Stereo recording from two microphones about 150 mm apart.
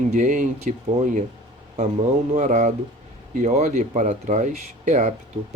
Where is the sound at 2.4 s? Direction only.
50° right (ahead or behind).